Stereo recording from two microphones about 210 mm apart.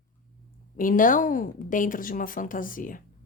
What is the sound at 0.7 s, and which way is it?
Speech, 40° left (ahead or behind).